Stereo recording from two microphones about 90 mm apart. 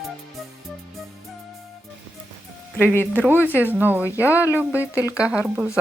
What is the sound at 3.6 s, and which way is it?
Speech, 20° right (ahead or behind).